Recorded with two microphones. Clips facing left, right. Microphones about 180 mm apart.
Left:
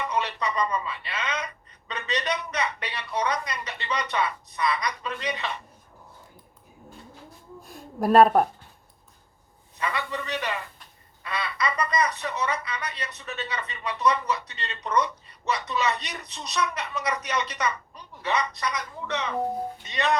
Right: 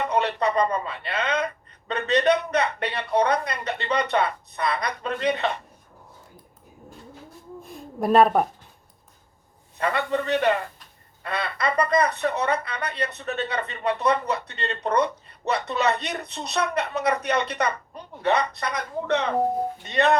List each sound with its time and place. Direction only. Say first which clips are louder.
0.0 s speech: right 5 dB; 55° right (ahead or behind)
7.6 s a sound: even; centre (ahead or behind)
9.7 s speech: right 6 dB; 55° right (ahead or behind)